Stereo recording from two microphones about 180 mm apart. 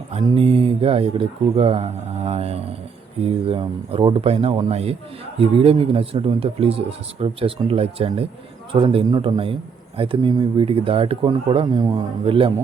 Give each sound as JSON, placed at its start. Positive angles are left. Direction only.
{"t": 0.3, "sound": "a man's voice", "side_deg": -30}